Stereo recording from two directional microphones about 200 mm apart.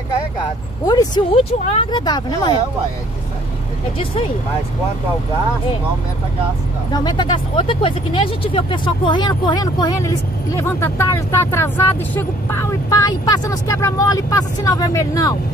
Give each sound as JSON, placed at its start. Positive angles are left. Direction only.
{"t": 0.8, "sound": "speech", "side_deg": 20}
{"t": 6.9, "sound": "speech", "side_deg": 20}